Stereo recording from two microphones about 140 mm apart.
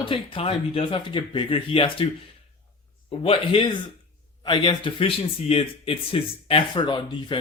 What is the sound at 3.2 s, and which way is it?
Speech, 40° left (ahead or behind).